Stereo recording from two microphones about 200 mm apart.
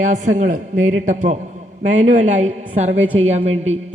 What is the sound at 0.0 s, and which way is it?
A man's voice, 40° right (ahead or behind).